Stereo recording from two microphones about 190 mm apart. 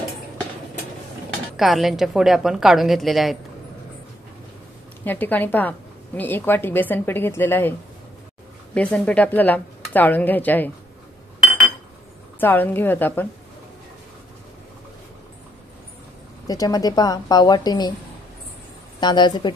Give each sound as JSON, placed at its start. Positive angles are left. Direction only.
{"t": 1.6, "sound": "a woman's voice", "side_deg": 0}
{"t": 5.0, "sound": "a woman's voice", "side_deg": 10}
{"t": 8.7, "sound": "a woman's voice", "side_deg": 5}
{"t": 12.4, "sound": "a woman's voice", "side_deg": 10}
{"t": 16.4, "sound": "a woman's voice", "side_deg": 20}
{"t": 18.9, "sound": "a woman's voice", "side_deg": 25}